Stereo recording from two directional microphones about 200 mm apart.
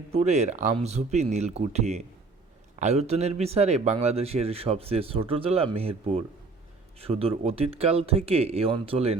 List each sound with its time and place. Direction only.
0.1 s a man's voice: 35° right (ahead or behind)